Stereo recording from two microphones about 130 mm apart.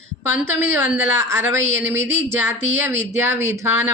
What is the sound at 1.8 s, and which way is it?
Speech, 15° right (ahead or behind).